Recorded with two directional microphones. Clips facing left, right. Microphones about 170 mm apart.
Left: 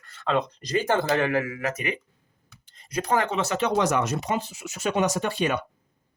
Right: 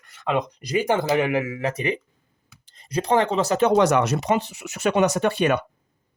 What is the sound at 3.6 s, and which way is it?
Speech, 55° right (ahead or behind).